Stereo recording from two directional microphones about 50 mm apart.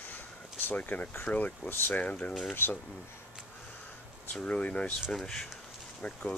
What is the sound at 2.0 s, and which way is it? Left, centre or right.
Speech, left.